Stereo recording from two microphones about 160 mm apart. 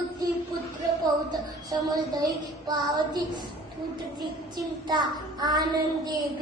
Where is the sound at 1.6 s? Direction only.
25° right (ahead or behind).